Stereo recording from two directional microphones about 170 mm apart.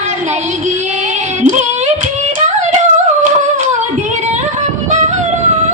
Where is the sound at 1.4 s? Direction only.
45° right (ahead or behind).